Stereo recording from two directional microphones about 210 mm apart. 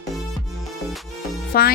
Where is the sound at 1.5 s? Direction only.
45° left (ahead or behind).